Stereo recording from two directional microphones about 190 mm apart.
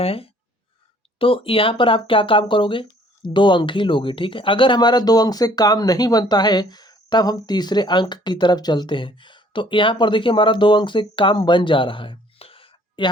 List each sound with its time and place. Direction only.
0.0 s speech: 30° left (ahead or behind)